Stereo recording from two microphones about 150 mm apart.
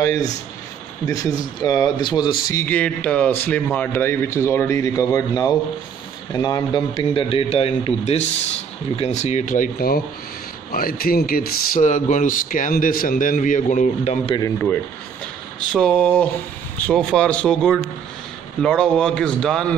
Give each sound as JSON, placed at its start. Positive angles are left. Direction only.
{"t": 0.0, "sound": "speech", "side_deg": 20}
{"t": 2.6, "sound": "a man's voice", "side_deg": 10}
{"t": 15.7, "sound": "a man's voice", "side_deg": 5}